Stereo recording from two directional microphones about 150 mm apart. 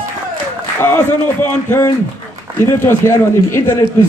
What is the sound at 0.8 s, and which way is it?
Speech, 15° left (ahead or behind).